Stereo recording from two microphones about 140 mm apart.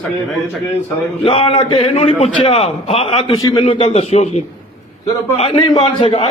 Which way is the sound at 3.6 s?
45° left (ahead or behind).